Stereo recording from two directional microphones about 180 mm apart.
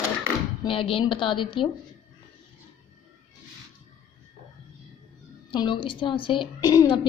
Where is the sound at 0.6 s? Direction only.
30° left (ahead or behind).